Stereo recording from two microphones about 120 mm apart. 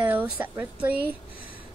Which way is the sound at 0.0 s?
15° right (ahead or behind).